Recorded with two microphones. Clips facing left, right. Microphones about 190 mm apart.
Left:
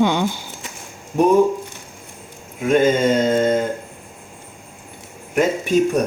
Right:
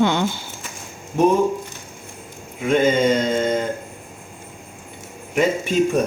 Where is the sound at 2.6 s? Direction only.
5° left (ahead or behind).